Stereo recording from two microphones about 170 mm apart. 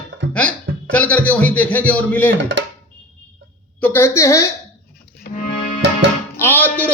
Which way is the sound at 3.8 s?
15° left (ahead or behind).